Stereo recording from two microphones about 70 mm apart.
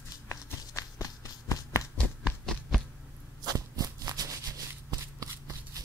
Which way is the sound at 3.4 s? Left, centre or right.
Right.